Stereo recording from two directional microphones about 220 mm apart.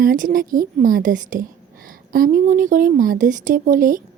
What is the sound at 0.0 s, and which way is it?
A woman's voice, 40° right (ahead or behind).